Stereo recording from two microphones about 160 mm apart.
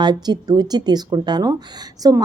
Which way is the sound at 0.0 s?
25° right (ahead or behind).